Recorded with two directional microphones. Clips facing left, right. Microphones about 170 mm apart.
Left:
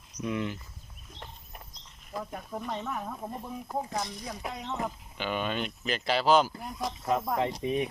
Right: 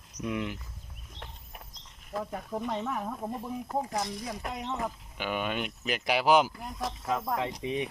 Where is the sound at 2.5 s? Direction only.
15° right (ahead or behind).